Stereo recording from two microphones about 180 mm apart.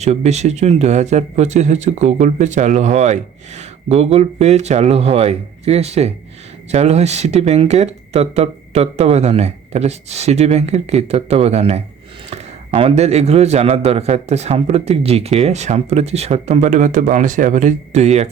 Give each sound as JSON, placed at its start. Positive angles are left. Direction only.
{"t": 0.0, "sound": "speech", "side_deg": -40}